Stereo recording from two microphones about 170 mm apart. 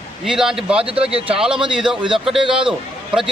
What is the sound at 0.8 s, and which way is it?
Speech, 35° right (ahead or behind).